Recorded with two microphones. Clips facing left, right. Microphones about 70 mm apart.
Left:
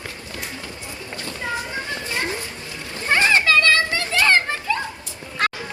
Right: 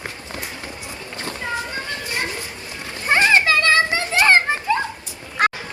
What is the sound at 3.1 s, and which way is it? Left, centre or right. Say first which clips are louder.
Children playing: right 1 dB; right.